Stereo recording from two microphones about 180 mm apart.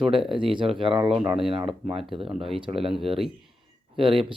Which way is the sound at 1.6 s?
Centre (ahead or behind).